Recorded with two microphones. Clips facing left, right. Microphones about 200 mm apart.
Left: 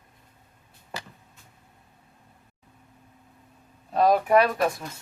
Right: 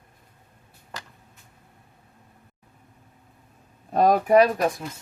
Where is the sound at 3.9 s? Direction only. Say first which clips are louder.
Right 2 dB; 45° right (ahead or behind).